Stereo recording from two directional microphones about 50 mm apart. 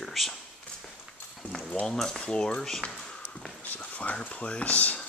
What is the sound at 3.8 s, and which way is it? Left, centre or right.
Speech, left.